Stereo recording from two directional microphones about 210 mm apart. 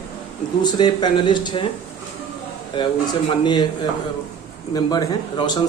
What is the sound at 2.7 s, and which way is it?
Speech, 20° left (ahead or behind).